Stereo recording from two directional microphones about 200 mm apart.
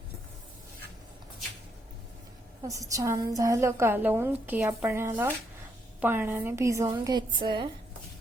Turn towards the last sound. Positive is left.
turn(degrees=-25)  # may be behind; listen again after turning